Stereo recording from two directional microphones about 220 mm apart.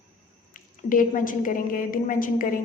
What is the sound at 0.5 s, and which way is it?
A woman's voice, 40° left (ahead or behind).